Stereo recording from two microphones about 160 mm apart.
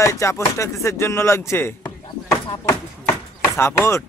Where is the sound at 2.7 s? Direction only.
15° left (ahead or behind).